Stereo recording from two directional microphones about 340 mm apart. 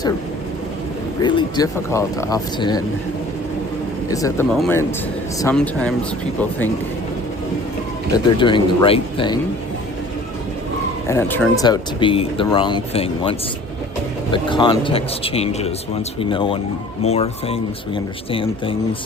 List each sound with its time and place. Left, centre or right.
1.2 s speech: centre
4.1 s speech: centre
8.4 s speech: centre
11.1 s speech: centre